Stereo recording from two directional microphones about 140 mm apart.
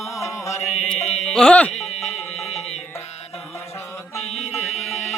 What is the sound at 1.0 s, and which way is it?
Carnatic music, 50° left (ahead or behind).